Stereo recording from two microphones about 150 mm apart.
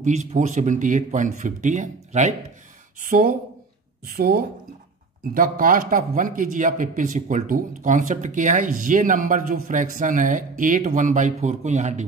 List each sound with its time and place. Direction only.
0.0 s speech: 50° right (ahead or behind)
4.0 s speech: 90° right
5.3 s speech: 65° right (ahead or behind)